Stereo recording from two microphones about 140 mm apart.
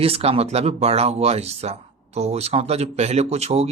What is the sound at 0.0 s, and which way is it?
Speech, 45° right (ahead or behind).